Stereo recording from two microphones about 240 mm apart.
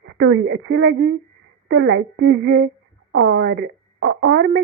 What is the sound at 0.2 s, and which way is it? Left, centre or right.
Speech, right.